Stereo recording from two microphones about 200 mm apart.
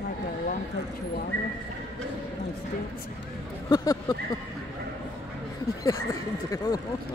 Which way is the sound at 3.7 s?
15° left (ahead or behind).